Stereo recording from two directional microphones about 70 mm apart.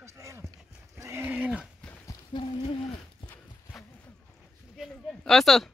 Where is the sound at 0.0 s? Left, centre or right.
Right.